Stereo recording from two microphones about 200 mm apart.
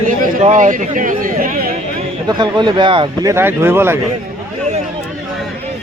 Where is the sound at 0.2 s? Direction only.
40° right (ahead or behind).